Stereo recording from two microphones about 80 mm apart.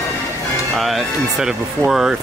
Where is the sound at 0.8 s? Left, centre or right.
Centre.